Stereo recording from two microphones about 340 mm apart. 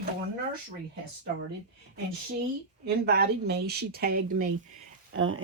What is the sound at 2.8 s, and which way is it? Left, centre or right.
Speech, right.